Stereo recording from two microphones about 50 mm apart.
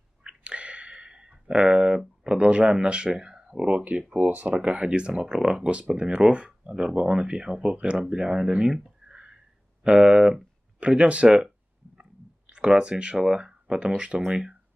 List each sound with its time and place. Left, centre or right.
0.2 s a sound: right
1.5 s speech: centre; by 4.6 s right
4.6 s speech: centre
12.4 s speech: right